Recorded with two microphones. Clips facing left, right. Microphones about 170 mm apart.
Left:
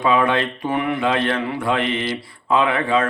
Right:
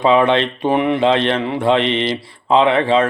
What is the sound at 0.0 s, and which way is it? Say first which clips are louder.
Speech: right 5 dB; 25° right (ahead or behind).